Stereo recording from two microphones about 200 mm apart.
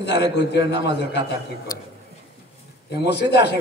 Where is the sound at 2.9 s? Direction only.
55° left (ahead or behind).